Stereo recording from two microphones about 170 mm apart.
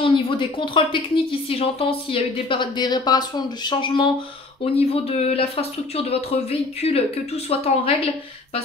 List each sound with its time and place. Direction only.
0.0 s speech: 30° left (ahead or behind)